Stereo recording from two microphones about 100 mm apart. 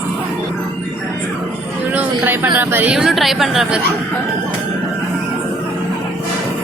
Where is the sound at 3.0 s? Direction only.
Centre (ahead or behind).